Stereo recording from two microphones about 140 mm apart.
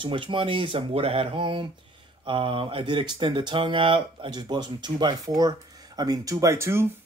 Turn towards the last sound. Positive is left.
turn(degrees=-20)  # may be behind; listen again after turning